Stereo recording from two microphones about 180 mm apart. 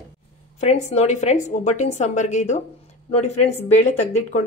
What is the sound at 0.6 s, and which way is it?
A woman's voice, 40° left (ahead or behind).